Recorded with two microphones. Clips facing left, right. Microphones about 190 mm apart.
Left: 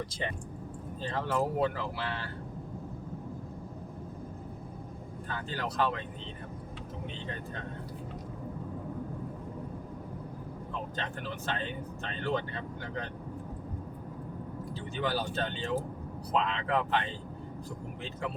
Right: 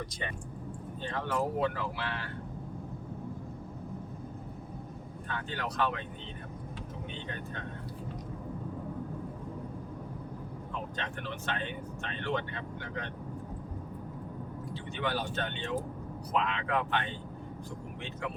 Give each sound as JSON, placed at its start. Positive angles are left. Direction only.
{"t": 0.0, "sound": "speech", "side_deg": 30}
{"t": 5.3, "sound": "speech", "side_deg": 35}
{"t": 10.9, "sound": "speech", "side_deg": 35}
{"t": 14.9, "sound": "speech", "side_deg": 35}